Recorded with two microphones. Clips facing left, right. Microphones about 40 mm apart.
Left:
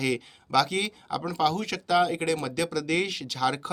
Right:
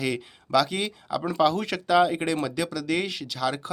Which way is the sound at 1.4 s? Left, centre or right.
Centre.